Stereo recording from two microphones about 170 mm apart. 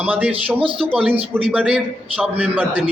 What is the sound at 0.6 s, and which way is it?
Speech, 30° right (ahead or behind).